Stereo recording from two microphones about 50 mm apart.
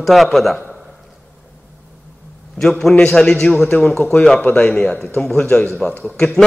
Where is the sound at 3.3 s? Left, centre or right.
Centre.